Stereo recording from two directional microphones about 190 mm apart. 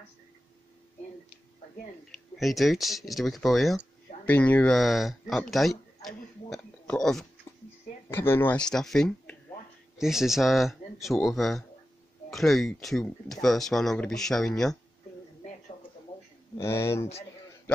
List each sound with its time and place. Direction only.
2.0 s speech: centre (ahead or behind)
16.5 s speech: 15° left (ahead or behind)